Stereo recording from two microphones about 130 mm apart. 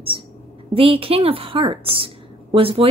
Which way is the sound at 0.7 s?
45° right (ahead or behind).